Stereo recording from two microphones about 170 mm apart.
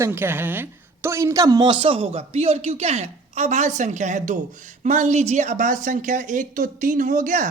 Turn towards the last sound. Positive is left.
turn(degrees=-50)  # may be behind; listen again after turning